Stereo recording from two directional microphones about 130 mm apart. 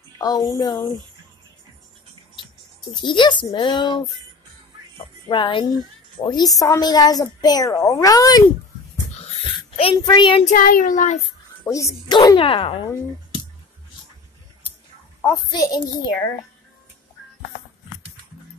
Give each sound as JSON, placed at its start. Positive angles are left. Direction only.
{"t": 0.2, "sound": "a woman's voice", "side_deg": 30}
{"t": 2.9, "sound": "a child's voice", "side_deg": 35}
{"t": 5.3, "sound": "a woman's voice", "side_deg": 40}
{"t": 9.2, "sound": "wheeze", "side_deg": 55}
{"t": 10.0, "sound": "a child's voice", "side_deg": 35}
{"t": 10.4, "sound": "child singing", "side_deg": 90}
{"t": 11.6, "sound": "a woman's voice", "side_deg": 25}
{"t": 12.4, "sound": "speech", "side_deg": 45}
{"t": 15.5, "sound": "a child's voice", "side_deg": 30}